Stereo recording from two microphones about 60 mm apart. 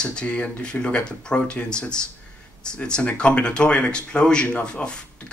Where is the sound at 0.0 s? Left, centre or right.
Centre.